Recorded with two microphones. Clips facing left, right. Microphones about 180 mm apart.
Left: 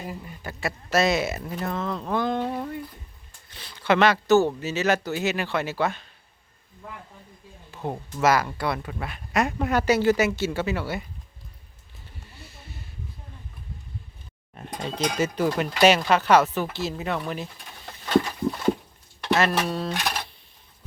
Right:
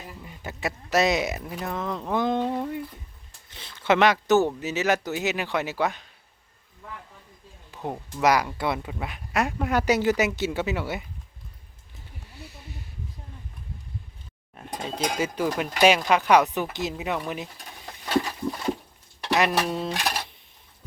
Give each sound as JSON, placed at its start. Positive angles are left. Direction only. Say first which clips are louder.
{"t": 0.4, "sound": "speech", "louder": "even", "side_deg": -20}
{"t": 3.5, "sound": "speech", "louder": "even", "side_deg": -20}
{"t": 7.7, "sound": "speech", "louder": "left 1 dB", "side_deg": -15}
{"t": 9.8, "sound": "speech", "louder": "left 2 dB", "side_deg": -15}
{"t": 14.5, "sound": "speech", "louder": "left 1 dB", "side_deg": -5}
{"t": 19.3, "sound": "speech", "louder": "even", "side_deg": -15}